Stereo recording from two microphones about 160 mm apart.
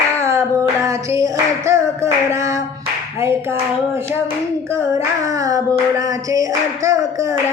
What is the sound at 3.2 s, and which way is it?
Speech, 15° right (ahead or behind).